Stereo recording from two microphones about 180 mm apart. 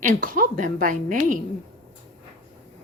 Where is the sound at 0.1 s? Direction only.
50° right (ahead or behind).